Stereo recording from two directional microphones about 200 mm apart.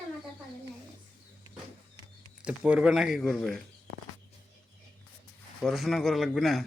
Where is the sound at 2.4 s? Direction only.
5° right (ahead or behind).